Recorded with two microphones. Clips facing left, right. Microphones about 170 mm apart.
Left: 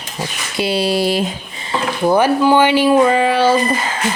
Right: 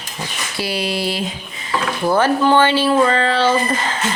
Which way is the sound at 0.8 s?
40° left (ahead or behind).